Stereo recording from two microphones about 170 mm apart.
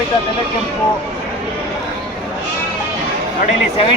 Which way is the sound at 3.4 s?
35° left (ahead or behind).